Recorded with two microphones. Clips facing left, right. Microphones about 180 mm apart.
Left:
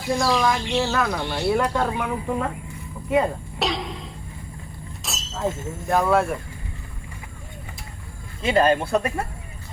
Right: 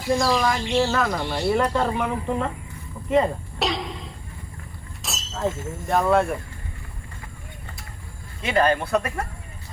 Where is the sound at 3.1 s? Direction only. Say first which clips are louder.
Right 1 dB; centre (ahead or behind).